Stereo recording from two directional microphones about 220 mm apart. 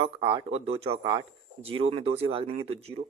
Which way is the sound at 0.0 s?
20° right (ahead or behind).